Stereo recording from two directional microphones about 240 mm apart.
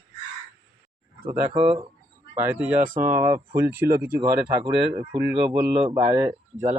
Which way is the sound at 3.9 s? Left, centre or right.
Right.